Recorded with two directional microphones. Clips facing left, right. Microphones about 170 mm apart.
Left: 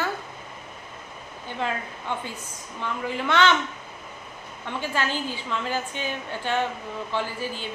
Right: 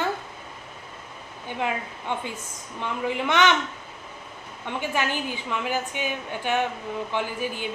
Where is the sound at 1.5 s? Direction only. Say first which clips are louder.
Right 1 dB; 15° right (ahead or behind).